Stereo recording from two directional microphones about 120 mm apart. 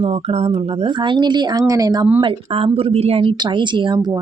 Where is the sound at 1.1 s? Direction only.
40° right (ahead or behind).